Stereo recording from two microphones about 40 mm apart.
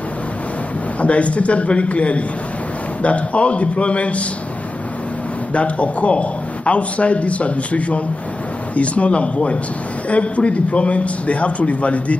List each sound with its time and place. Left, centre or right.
1.0 s a man's voice: left
5.5 s a man's voice: left